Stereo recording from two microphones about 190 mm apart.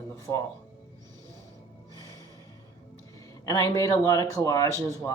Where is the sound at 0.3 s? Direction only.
10° left (ahead or behind).